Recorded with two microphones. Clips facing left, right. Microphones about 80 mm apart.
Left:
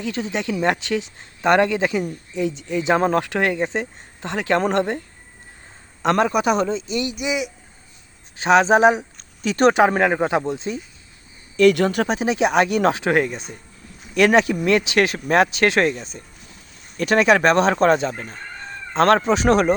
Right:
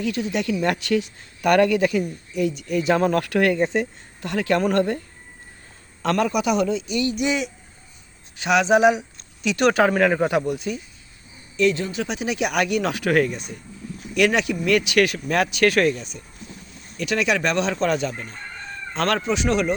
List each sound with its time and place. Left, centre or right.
0.0 s speech: left
6.0 s speech: left
7.2 s speech: centre
8.4 s speech: left
9.9 s speech: left
11.5 s speech: left
12.0 s speech: left
17.0 s speech: left